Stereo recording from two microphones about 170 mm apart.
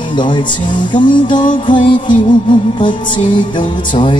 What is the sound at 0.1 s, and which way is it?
Music, 30° left (ahead or behind).